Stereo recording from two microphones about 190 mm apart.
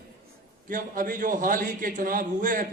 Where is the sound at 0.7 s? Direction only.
45° right (ahead or behind).